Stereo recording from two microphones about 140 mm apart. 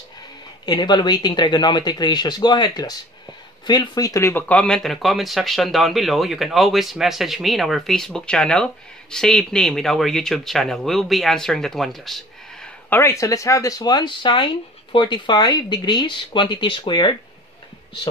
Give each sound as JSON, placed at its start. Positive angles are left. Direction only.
{"t": 0.7, "sound": "speech", "side_deg": 30}
{"t": 12.9, "sound": "speech", "side_deg": 20}